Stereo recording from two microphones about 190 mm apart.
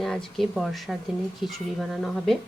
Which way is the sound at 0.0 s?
Centre (ahead or behind).